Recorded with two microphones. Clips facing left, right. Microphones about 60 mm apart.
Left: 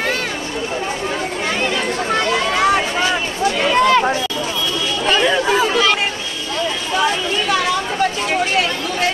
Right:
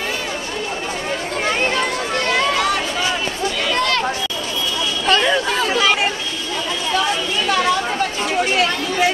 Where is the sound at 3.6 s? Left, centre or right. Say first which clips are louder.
Left 7 dB; centre.